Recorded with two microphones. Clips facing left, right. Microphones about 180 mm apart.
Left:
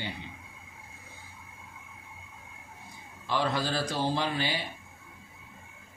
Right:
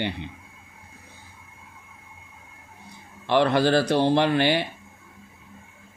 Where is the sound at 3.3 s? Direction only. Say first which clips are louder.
Right 10 dB; 70° right (ahead or behind).